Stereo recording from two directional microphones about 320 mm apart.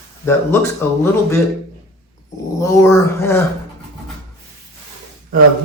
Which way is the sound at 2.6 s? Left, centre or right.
Centre.